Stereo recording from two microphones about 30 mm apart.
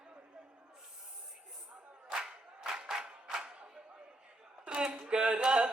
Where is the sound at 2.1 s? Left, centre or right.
Right.